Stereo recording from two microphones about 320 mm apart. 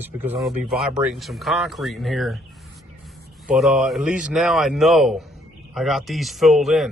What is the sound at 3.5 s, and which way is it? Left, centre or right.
Speech, centre.